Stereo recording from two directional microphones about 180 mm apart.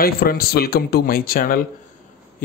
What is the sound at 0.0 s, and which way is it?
A man's voice, 55° left (ahead or behind).